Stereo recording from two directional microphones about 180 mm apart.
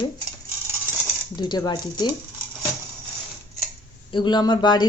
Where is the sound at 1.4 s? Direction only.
25° left (ahead or behind).